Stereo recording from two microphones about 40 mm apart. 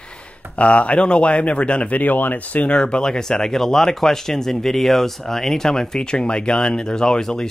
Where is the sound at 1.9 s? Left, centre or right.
Left.